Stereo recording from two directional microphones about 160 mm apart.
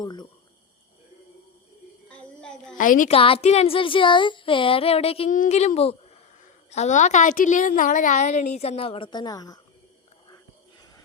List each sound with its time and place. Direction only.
0.0 s speech: 25° left (ahead or behind)
2.0 s a sound: 5° left (ahead or behind)
2.7 s a woman's voice: 55° left (ahead or behind)
3.1 s speech: 35° left (ahead or behind)
5.3 s a woman's voice: 50° left (ahead or behind); by 9.6 s 25° left (ahead or behind)